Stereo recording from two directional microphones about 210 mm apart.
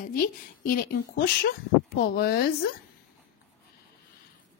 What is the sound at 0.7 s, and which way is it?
Speech, 45° left (ahead or behind).